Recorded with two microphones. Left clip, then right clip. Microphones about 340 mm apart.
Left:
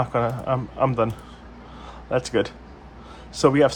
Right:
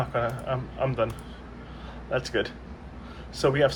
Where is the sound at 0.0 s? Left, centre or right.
Centre.